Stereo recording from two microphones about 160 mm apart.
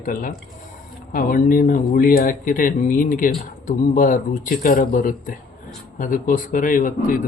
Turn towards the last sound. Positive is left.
turn(degrees=60)  # may be behind; listen again after turning